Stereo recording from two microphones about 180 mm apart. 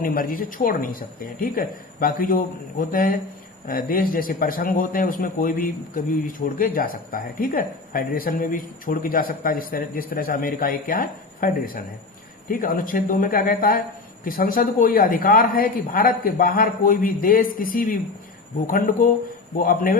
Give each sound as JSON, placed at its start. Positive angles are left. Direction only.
{"t": 0.0, "sound": "a man's voice", "side_deg": 55}